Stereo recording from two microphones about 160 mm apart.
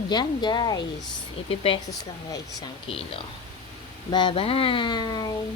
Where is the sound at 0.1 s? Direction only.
25° left (ahead or behind).